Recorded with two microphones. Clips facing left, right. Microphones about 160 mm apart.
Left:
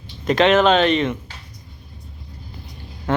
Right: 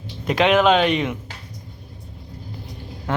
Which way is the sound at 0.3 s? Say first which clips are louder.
Left 1 dB; 10° right (ahead or behind).